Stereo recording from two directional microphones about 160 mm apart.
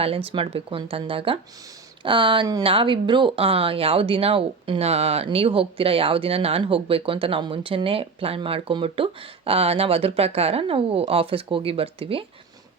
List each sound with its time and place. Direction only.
0.3 s speech: 35° right (ahead or behind)